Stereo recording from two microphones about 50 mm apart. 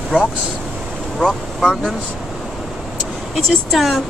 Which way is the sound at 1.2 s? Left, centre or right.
Centre.